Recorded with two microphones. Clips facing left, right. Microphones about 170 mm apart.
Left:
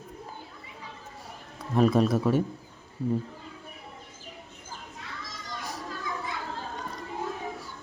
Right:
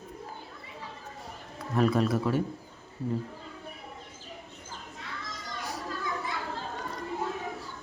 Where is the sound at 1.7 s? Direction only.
15° left (ahead or behind).